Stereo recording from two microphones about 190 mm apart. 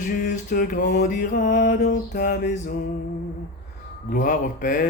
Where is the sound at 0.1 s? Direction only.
45° left (ahead or behind).